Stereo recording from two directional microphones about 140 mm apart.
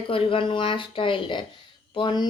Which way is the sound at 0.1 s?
40° left (ahead or behind).